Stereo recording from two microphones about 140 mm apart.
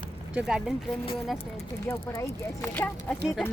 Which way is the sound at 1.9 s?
15° left (ahead or behind).